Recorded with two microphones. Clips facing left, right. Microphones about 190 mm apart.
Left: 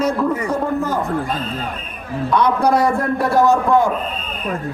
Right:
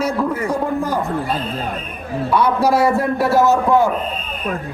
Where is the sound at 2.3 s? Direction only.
5° right (ahead or behind).